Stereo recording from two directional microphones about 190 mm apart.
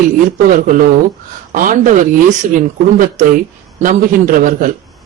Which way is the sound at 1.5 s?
45° right (ahead or behind).